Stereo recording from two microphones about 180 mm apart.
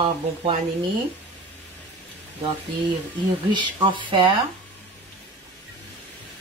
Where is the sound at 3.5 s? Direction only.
25° right (ahead or behind).